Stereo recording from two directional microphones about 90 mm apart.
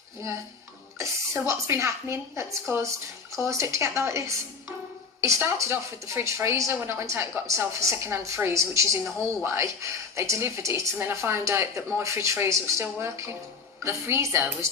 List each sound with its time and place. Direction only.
0.9 s a woman's voice: 30° right (ahead or behind)
5.5 s a woman's voice: 25° right (ahead or behind)